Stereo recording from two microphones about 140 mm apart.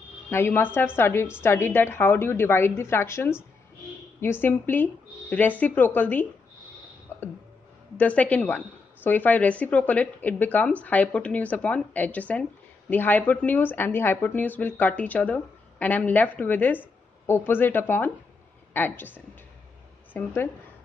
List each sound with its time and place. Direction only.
0.3 s a woman's voice: 15° left (ahead or behind)
8.0 s a woman's voice: 10° left (ahead or behind)